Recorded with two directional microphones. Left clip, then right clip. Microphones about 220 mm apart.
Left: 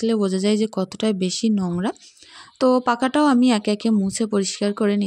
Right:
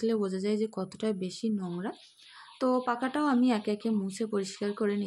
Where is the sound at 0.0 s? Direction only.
35° left (ahead or behind).